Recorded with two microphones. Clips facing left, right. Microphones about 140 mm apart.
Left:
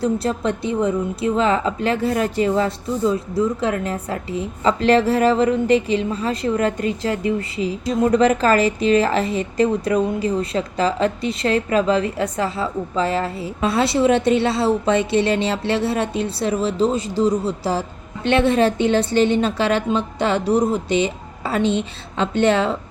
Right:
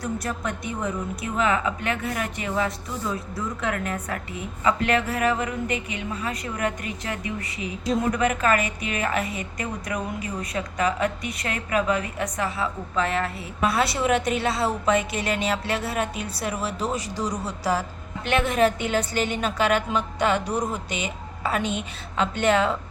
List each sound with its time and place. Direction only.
0.0 s a woman's voice: 30° left (ahead or behind)